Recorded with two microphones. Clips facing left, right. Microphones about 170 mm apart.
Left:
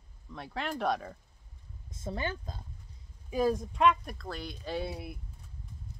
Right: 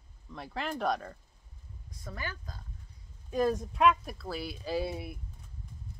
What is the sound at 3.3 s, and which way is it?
Speech, 5° left (ahead or behind).